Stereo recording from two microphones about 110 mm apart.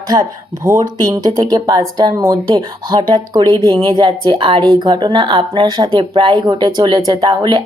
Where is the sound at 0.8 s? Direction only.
30° right (ahead or behind).